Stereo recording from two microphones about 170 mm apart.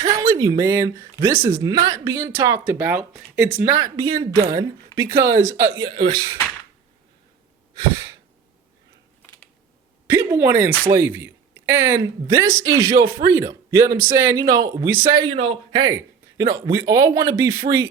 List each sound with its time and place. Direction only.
0.0 s speech: 20° right (ahead or behind)
10.1 s speech: 15° right (ahead or behind)
15.3 s speech: 35° right (ahead or behind)